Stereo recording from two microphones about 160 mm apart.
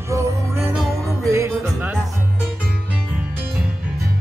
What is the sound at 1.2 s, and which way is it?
Music, 20° right (ahead or behind).